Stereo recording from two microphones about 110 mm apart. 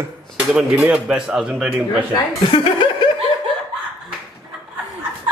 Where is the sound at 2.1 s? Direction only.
45° left (ahead or behind).